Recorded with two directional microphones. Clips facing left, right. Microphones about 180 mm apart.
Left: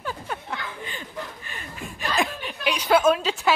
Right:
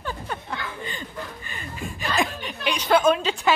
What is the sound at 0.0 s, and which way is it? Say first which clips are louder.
Chuckle: even; 5° left (ahead or behind).